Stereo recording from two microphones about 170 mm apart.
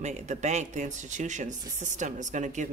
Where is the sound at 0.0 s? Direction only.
45° right (ahead or behind).